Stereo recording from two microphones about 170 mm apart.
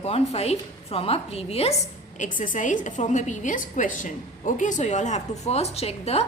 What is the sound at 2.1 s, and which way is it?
A woman's voice, 50° left (ahead or behind).